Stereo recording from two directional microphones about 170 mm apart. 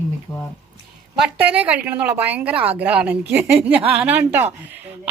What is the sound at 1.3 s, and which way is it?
A woman's voice, 10° right (ahead or behind).